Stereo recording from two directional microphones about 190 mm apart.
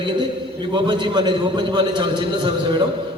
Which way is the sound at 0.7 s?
25° right (ahead or behind).